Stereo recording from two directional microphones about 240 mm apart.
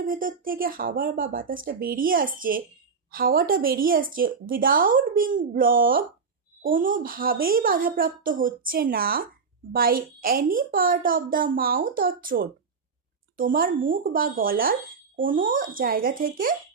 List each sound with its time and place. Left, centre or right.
0.0 s speech: right